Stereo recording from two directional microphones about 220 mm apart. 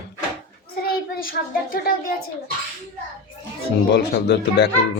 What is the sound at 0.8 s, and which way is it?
Child singing, 40° left (ahead or behind).